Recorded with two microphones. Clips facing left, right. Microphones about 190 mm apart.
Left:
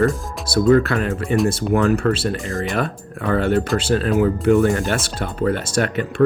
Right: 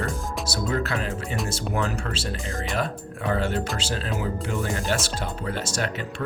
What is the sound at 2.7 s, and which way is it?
Speech, 60° left (ahead or behind).